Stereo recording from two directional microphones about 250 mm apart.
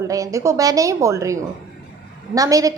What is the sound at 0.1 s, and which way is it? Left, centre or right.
A woman's voice, centre.